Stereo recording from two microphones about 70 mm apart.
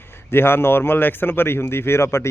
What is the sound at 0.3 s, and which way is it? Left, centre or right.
Speech, left.